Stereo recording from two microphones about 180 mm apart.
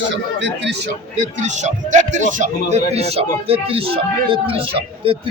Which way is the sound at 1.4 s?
40° right (ahead or behind).